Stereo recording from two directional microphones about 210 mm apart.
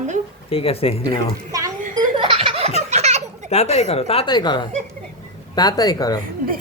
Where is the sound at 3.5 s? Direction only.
30° left (ahead or behind).